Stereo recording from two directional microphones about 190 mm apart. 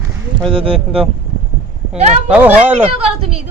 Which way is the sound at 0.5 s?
30° right (ahead or behind).